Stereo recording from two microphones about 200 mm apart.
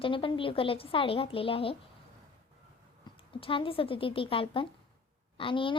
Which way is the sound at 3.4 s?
25° left (ahead or behind).